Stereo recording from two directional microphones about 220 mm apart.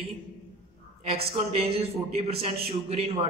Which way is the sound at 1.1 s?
25° right (ahead or behind).